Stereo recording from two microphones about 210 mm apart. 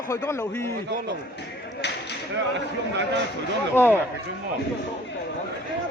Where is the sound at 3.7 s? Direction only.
10° left (ahead or behind).